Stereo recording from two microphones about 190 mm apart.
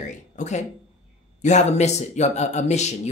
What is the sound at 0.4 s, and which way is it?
Speech, 35° left (ahead or behind).